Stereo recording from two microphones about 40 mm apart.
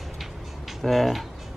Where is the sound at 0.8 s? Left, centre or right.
Centre.